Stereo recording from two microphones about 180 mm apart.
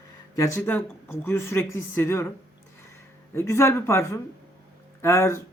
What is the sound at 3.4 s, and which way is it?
Speech, 15° left (ahead or behind).